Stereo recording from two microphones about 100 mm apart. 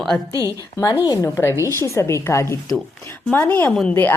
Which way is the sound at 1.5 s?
25° right (ahead or behind).